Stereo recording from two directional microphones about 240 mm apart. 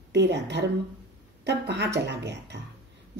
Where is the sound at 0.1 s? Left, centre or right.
Right.